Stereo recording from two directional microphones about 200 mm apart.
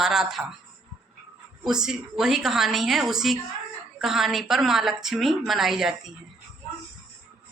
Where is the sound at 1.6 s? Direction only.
5° right (ahead or behind).